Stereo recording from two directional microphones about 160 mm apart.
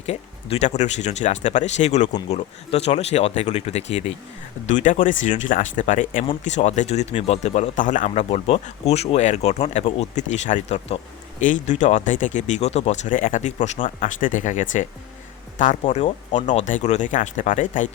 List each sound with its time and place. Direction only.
0.0 s speech: 40° left (ahead or behind)
4.7 s speech: 55° left (ahead or behind)